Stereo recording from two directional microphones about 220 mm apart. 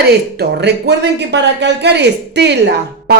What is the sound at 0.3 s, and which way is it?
Speech, 50° right (ahead or behind).